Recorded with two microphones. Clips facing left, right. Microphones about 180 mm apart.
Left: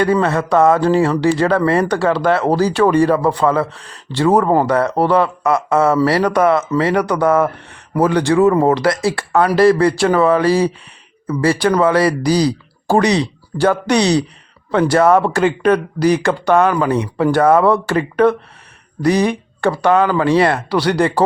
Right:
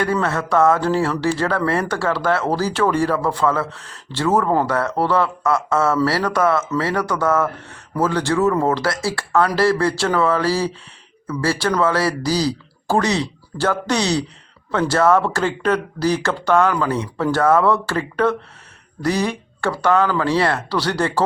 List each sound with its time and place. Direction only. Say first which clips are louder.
0.0 s speech: left 5 dB; 15° left (ahead or behind)